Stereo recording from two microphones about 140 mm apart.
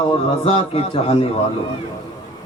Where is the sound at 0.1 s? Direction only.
40° left (ahead or behind).